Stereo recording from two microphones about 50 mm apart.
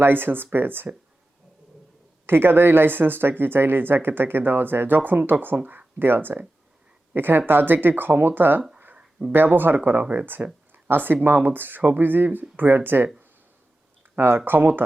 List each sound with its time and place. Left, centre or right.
0.0 s speech: right
2.2 s speech: right
9.0 s a sound: right
9.3 s speech: right
14.2 s speech: right